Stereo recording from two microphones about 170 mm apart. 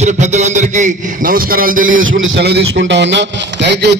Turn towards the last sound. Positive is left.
turn(degrees=-90)